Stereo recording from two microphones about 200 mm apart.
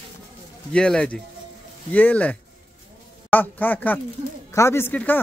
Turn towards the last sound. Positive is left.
turn(degrees=10)  # may be behind; listen again after turning